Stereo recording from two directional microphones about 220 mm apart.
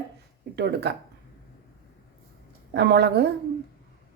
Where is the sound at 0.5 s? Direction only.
50° right (ahead or behind).